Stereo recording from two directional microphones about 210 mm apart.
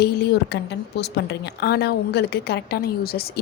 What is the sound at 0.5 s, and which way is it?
Speech, 55° left (ahead or behind).